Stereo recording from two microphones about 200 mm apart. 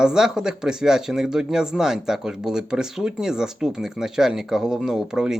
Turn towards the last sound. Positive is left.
turn(degrees=-5)  # may be behind; listen again after turning